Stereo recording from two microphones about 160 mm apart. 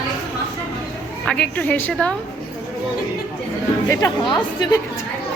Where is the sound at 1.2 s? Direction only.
5° left (ahead or behind).